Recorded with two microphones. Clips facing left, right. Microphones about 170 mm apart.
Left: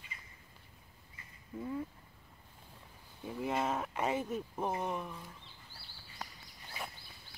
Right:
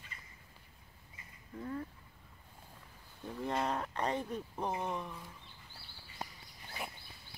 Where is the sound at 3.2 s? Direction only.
5° left (ahead or behind).